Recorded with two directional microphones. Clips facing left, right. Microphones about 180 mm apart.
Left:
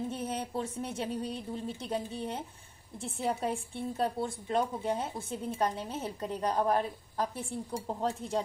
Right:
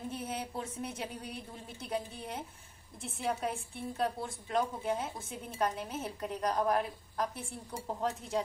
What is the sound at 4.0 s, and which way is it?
Speech, 30° left (ahead or behind).